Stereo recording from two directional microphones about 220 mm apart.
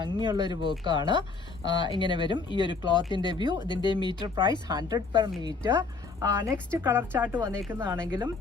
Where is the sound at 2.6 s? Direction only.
20° left (ahead or behind).